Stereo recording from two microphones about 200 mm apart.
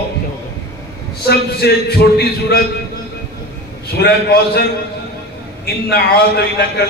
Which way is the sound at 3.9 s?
50° left (ahead or behind).